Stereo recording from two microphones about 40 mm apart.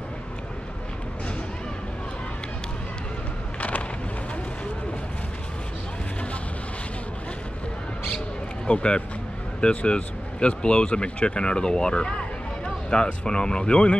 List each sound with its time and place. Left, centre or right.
8.6 s speech: left